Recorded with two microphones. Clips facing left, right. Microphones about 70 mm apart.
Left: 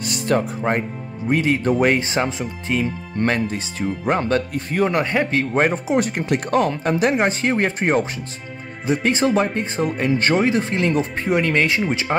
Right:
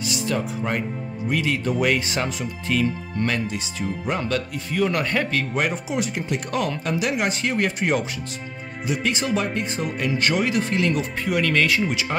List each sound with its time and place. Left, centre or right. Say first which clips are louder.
0.0 s speech: left 5 dB; left
3.2 s speech: left 5 dB; left
4.9 s speech: left 4 dB; left